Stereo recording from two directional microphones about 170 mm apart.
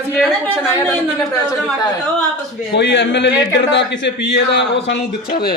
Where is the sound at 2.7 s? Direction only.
90° left.